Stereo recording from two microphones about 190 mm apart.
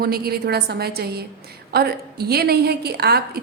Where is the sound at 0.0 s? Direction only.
55° right (ahead or behind).